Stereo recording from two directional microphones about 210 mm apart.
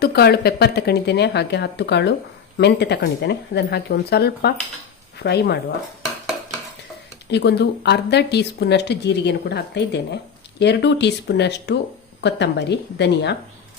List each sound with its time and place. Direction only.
0.0 s speech: 50° left (ahead or behind)
7.3 s a woman's voice: 55° left (ahead or behind)